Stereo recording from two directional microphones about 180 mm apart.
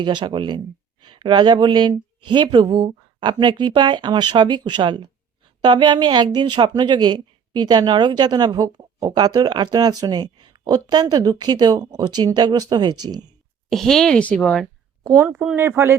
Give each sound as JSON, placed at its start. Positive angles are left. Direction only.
{"t": 0.0, "sound": "a woman's voice", "side_deg": -25}
{"t": 13.7, "sound": "speech", "side_deg": 0}
{"t": 15.3, "sound": "speech", "side_deg": -10}